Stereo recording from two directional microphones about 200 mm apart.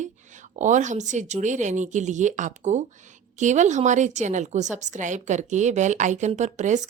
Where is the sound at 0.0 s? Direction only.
40° right (ahead or behind).